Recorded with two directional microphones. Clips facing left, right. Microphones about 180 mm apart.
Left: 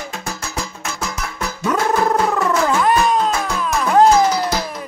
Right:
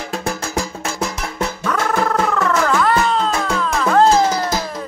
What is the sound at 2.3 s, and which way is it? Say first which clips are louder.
Music: even; 15° left (ahead or behind).